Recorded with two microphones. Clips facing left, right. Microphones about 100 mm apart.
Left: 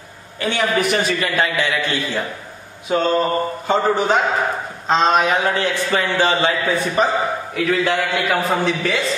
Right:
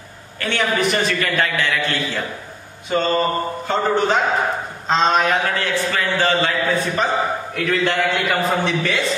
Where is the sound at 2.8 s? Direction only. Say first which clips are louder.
Left 1 dB; 5° left (ahead or behind).